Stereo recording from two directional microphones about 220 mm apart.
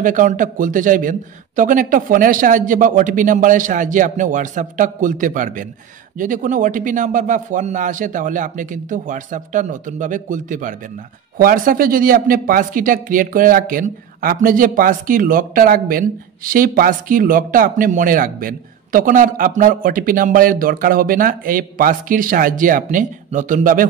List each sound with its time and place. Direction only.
0.0 s a man's voice: 35° right (ahead or behind)